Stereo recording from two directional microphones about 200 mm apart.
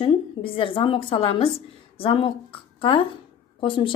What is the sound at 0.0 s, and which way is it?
A woman's voice, 25° left (ahead or behind).